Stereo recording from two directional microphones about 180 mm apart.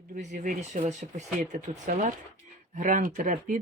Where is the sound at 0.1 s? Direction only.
45° right (ahead or behind).